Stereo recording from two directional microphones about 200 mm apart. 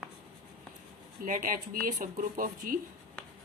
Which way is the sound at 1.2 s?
40° right (ahead or behind).